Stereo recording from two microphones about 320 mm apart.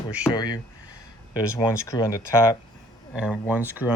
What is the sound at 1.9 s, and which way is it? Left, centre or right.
Speech, centre.